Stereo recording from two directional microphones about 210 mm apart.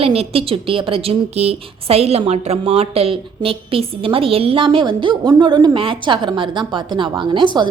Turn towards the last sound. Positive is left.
turn(degrees=-20)  # may be behind; listen again after turning